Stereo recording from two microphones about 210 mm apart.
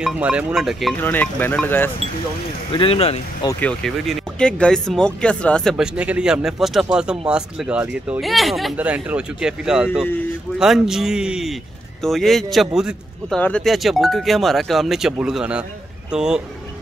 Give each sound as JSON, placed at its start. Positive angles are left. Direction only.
{"t": 0.0, "sound": "speech", "side_deg": -5}
{"t": 2.7, "sound": "speech", "side_deg": 25}
{"t": 3.4, "sound": "speech", "side_deg": 5}